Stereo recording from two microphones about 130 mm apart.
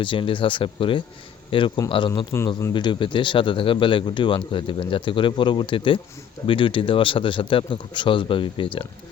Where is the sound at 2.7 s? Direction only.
35° left (ahead or behind).